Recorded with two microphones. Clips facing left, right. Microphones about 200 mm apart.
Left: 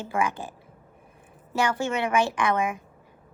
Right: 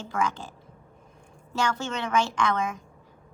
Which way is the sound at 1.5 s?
10° left (ahead or behind).